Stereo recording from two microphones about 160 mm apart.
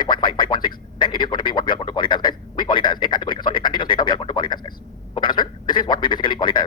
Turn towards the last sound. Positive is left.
turn(degrees=30)  # may be behind; listen again after turning